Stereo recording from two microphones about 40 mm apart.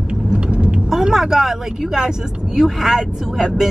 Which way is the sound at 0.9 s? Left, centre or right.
Centre.